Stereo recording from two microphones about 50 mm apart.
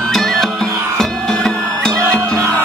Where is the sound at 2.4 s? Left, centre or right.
Right.